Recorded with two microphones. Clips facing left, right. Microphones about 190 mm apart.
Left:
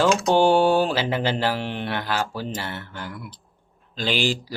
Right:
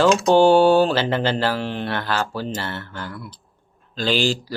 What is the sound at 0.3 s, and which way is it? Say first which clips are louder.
Mantra: right 5 dB; 15° left (ahead or behind).